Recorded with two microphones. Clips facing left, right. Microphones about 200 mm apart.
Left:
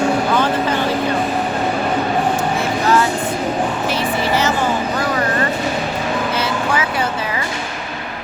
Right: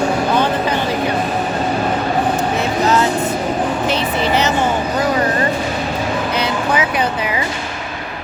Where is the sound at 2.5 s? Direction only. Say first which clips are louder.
Right 1 dB; 20° right (ahead or behind).